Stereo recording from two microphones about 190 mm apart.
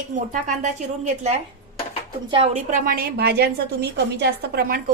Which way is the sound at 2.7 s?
50° right (ahead or behind).